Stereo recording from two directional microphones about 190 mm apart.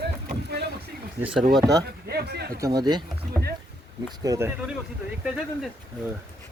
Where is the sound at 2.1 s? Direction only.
55° right (ahead or behind).